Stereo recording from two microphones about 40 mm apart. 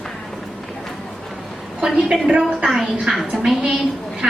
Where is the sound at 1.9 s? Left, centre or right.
Right.